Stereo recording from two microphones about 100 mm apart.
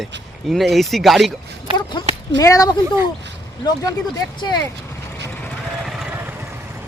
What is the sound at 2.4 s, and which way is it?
Speech, 35° left (ahead or behind).